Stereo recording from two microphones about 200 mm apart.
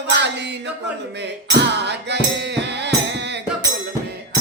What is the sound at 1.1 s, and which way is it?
Music, 60° right (ahead or behind).